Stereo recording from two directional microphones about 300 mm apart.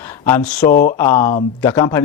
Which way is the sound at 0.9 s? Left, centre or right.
Centre.